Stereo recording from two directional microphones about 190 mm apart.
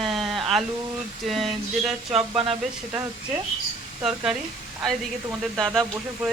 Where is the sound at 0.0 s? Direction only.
Centre (ahead or behind).